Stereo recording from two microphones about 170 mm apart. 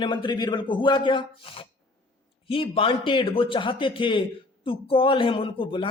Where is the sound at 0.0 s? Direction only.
30° left (ahead or behind).